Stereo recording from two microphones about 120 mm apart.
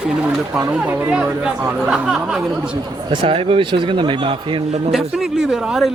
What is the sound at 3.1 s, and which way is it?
Speech, 45° right (ahead or behind).